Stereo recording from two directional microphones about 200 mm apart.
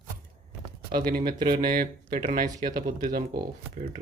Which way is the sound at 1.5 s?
45° right (ahead or behind).